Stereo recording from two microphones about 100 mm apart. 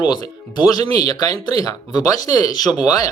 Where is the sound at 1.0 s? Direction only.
40° left (ahead or behind).